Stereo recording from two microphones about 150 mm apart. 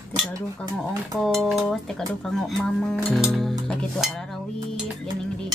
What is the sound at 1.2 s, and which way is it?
Music, centre (ahead or behind).